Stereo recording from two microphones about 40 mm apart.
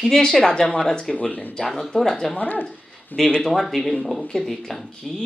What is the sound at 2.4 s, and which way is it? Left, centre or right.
Speech, left.